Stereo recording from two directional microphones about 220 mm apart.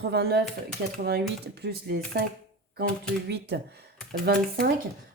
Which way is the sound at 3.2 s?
50° right (ahead or behind).